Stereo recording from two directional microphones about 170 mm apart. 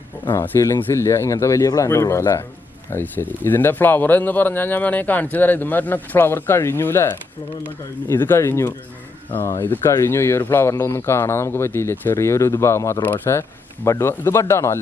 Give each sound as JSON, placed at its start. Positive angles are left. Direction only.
{"t": 0.3, "sound": "speech", "side_deg": 15}